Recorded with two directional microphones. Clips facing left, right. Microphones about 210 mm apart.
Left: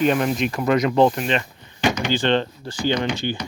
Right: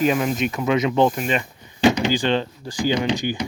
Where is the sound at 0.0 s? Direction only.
5° right (ahead or behind).